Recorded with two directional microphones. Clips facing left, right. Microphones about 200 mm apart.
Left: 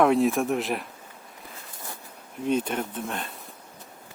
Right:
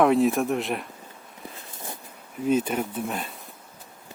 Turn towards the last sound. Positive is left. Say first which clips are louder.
# right 2 dB
turn(degrees=-5)  # may be behind; listen again after turning